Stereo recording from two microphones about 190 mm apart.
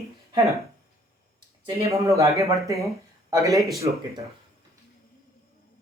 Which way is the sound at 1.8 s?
15° right (ahead or behind).